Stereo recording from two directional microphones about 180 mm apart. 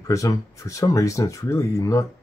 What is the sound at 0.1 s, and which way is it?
Speech, 20° left (ahead or behind).